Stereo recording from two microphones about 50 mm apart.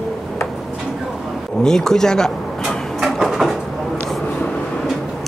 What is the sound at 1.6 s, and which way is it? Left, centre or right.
Speech, centre.